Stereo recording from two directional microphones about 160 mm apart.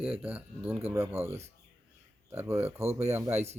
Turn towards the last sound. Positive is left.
turn(degrees=-40)  # may be behind; listen again after turning